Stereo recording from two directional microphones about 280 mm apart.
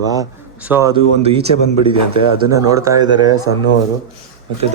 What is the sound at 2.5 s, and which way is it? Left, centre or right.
Speech, centre.